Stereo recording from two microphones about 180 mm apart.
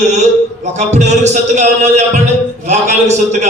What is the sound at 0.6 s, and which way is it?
A man's voice, 40° right (ahead or behind).